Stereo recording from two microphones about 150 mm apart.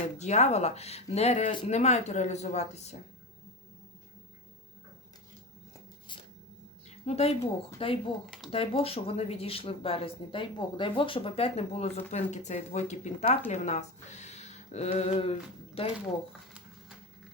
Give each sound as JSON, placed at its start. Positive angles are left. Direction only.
{"t": 0.2, "sound": "speech", "side_deg": 50}
{"t": 7.0, "sound": "a woman's voice", "side_deg": 45}